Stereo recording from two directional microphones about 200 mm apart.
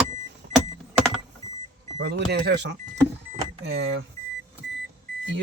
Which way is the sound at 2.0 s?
55° right (ahead or behind).